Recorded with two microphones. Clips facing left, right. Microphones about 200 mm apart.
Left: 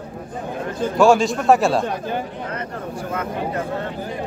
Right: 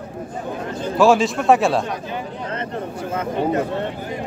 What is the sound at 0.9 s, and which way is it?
Speech, centre (ahead or behind).